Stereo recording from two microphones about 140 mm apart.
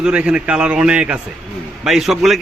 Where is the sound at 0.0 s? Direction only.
10° right (ahead or behind).